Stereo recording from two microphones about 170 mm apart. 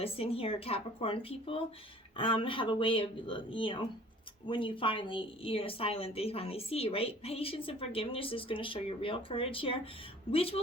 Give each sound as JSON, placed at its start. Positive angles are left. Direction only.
{"t": 0.0, "sound": "a woman's voice", "side_deg": 35}